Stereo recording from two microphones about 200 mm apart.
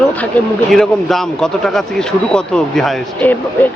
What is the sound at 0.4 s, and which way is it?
Speech, 10° left (ahead or behind).